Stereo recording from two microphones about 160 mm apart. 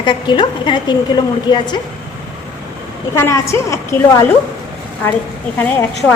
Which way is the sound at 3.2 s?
20° left (ahead or behind).